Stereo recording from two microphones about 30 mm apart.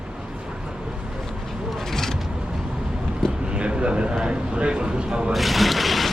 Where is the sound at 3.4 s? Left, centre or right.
Right.